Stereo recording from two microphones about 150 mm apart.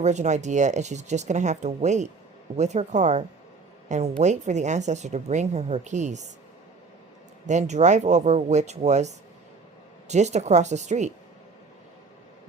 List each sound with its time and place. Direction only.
0.0 s a woman's voice: 50° right (ahead or behind)
7.4 s speech: 50° right (ahead or behind)